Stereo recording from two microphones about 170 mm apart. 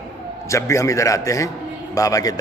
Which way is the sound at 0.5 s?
15° left (ahead or behind).